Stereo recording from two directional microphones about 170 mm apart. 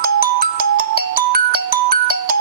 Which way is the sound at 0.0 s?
60° right (ahead or behind).